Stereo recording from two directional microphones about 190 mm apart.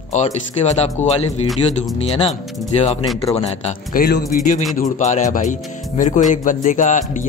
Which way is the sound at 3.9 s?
50° left (ahead or behind).